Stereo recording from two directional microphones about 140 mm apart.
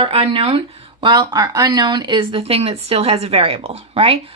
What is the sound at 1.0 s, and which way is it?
A woman's voice, 30° right (ahead or behind).